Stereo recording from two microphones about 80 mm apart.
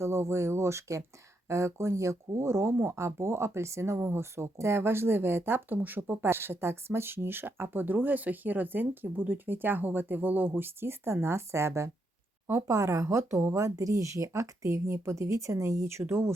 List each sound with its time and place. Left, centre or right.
0.0 s speech: right